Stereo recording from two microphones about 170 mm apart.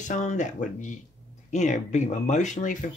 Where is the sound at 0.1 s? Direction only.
45° left (ahead or behind).